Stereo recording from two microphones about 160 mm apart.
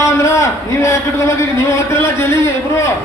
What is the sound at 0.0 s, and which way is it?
A man's voice, 20° left (ahead or behind).